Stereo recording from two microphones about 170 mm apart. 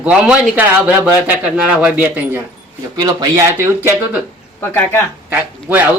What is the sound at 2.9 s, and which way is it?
Speech, 25° right (ahead or behind).